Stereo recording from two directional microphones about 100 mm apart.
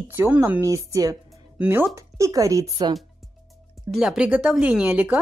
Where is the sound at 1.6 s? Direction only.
20° right (ahead or behind).